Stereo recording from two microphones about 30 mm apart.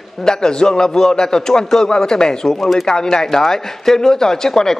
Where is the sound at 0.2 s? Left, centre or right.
Left.